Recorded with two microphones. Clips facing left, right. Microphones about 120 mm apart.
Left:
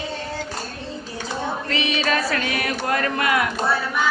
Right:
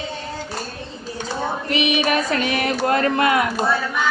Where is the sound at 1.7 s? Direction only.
15° right (ahead or behind).